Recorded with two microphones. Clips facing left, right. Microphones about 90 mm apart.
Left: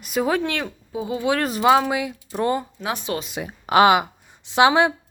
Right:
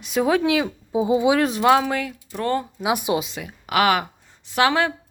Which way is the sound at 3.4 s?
30° left (ahead or behind).